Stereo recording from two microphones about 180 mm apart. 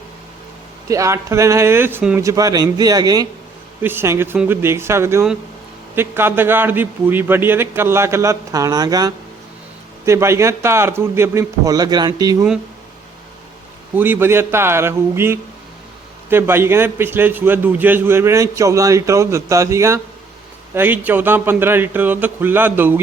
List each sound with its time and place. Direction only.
0.9 s a man's voice: 15° right (ahead or behind)
13.9 s a man's voice: 10° right (ahead or behind)